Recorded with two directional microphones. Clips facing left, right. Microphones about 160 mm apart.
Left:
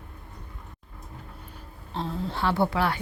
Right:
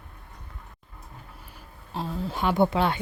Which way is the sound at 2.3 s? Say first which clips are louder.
Right 3 dB; 15° right (ahead or behind).